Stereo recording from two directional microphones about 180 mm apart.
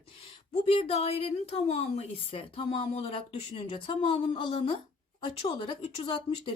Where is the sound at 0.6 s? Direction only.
35° left (ahead or behind).